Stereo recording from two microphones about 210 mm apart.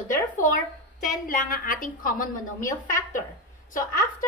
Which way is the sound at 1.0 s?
40° left (ahead or behind).